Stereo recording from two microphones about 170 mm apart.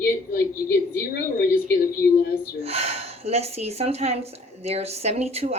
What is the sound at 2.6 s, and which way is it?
Speech, 35° right (ahead or behind).